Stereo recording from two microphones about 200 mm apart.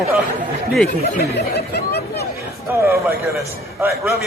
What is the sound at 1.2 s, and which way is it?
Speech, 55° left (ahead or behind).